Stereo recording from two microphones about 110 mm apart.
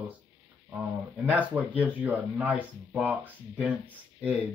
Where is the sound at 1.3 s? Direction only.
15° right (ahead or behind).